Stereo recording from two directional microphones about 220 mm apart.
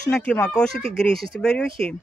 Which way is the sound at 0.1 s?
5° left (ahead or behind).